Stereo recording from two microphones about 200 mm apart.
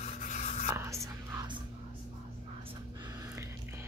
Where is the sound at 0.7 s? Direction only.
15° right (ahead or behind).